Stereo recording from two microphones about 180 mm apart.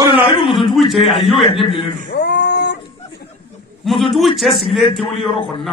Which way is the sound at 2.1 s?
70° left (ahead or behind).